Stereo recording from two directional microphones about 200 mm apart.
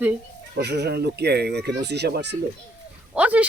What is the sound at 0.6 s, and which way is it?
Speech, 55° right (ahead or behind).